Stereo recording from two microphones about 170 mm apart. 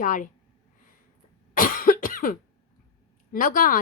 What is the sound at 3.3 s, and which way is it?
Speech, 55° left (ahead or behind).